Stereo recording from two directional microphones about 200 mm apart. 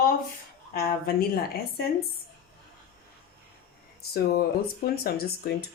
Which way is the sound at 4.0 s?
50° left (ahead or behind).